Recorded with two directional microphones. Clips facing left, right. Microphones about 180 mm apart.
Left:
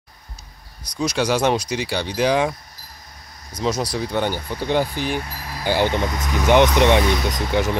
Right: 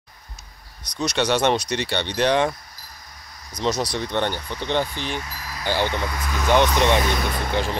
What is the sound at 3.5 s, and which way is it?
Speech, 5° left (ahead or behind).